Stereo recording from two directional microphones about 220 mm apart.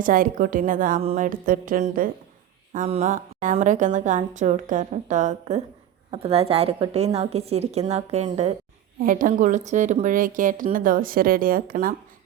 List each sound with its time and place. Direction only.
0.0 s a woman's voice: 40° right (ahead or behind)